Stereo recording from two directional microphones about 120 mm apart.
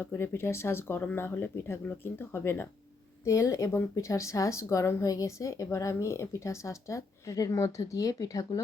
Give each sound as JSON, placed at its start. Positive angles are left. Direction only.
{"t": 0.0, "sound": "speech", "side_deg": 20}